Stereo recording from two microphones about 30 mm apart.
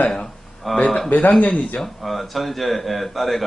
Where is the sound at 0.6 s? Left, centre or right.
Centre.